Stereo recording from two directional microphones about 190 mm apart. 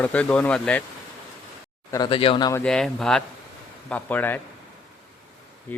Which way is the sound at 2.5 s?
5° left (ahead or behind).